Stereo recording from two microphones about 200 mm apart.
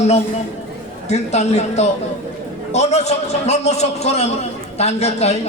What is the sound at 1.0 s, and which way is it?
A man's voice, 35° left (ahead or behind).